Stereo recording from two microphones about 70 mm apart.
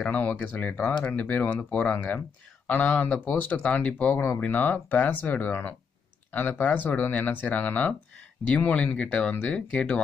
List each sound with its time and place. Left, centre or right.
0.0 s speech: centre